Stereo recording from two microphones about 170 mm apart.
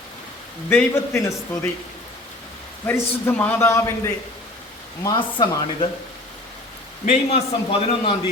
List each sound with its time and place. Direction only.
0.7 s a man's voice: 10° left (ahead or behind)
2.8 s a man's voice: 10° left (ahead or behind)
5.0 s speech: 25° left (ahead or behind)
7.1 s a man's voice: 40° left (ahead or behind)